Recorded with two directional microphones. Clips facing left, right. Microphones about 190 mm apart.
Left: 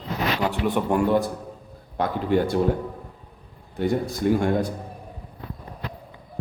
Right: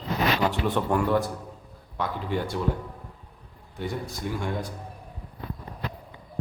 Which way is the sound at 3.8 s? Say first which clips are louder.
Left 9 dB; 55° left (ahead or behind).